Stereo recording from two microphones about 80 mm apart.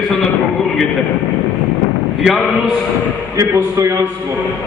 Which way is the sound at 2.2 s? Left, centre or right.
Centre.